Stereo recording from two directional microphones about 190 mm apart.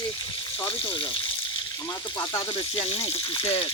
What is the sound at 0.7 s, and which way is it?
Speech, 30° left (ahead or behind).